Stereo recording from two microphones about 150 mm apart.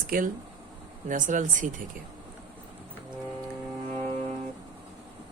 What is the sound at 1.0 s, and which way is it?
Speech, 55° right (ahead or behind).